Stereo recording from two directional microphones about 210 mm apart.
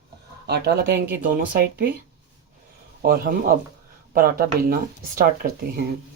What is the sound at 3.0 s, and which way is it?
Speech, 45° right (ahead or behind).